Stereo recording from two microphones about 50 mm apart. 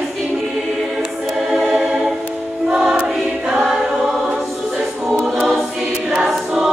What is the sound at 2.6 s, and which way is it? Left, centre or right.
Choir, centre.